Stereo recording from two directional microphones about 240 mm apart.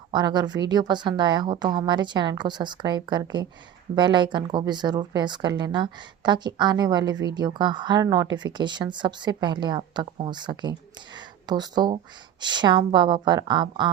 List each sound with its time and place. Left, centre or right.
0.1 s a woman's voice: centre